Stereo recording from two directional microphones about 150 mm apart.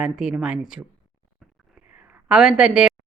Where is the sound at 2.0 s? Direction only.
5° right (ahead or behind).